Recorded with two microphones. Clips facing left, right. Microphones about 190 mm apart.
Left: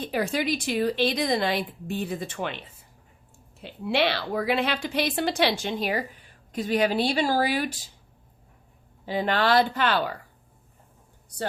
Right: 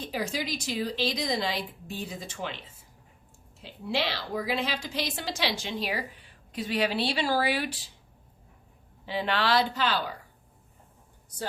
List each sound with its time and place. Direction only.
0.1 s speech: 55° left (ahead or behind)
3.6 s a woman's voice: 65° left (ahead or behind); by 7.9 s 45° left (ahead or behind)
9.0 s a woman's voice: 45° left (ahead or behind)